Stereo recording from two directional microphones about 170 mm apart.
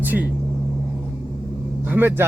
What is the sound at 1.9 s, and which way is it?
Speech, 10° right (ahead or behind).